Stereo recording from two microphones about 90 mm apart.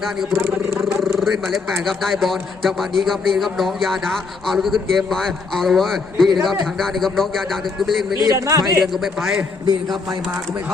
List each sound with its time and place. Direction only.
0.3 s speech: 30° right (ahead or behind)
1.0 s a man's voice: centre (ahead or behind)
8.2 s a man's voice: 40° right (ahead or behind)
8.8 s a man's voice: 5° right (ahead or behind)